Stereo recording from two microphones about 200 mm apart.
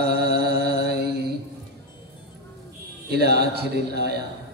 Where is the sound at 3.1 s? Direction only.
55° right (ahead or behind).